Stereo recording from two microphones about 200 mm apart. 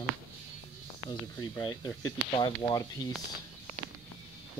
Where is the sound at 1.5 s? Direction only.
20° left (ahead or behind).